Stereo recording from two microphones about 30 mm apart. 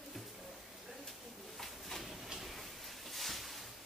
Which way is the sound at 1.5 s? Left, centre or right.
Centre.